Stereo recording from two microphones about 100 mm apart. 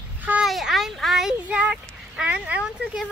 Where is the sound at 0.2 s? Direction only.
15° right (ahead or behind).